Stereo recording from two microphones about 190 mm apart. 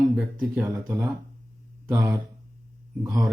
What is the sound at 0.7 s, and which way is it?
Speech, 20° right (ahead or behind).